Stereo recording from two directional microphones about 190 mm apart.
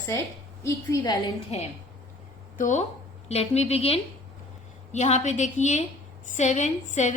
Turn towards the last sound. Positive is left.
turn(degrees=40)  # may be behind; listen again after turning